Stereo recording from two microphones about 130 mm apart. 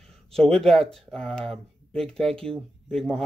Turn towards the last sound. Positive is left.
turn(degrees=5)  # may be behind; listen again after turning